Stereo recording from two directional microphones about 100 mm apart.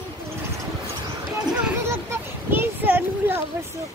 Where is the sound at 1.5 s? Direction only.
10° right (ahead or behind).